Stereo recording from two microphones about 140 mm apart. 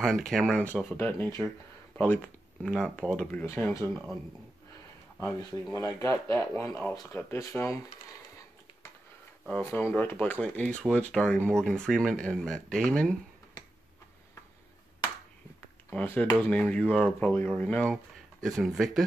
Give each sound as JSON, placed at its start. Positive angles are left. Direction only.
{"t": 0.0, "sound": "speech", "side_deg": 5}
{"t": 3.9, "sound": "speech", "side_deg": 0}
{"t": 5.2, "sound": "speech", "side_deg": 20}
{"t": 9.6, "sound": "speech", "side_deg": 15}
{"t": 15.9, "sound": "speech", "side_deg": 10}